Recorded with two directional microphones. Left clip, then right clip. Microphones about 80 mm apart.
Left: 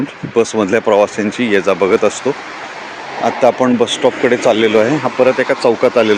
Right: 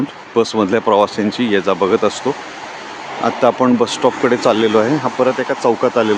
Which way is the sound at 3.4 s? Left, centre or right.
Centre.